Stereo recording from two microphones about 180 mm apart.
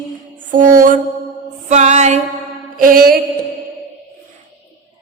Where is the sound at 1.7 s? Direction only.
40° right (ahead or behind).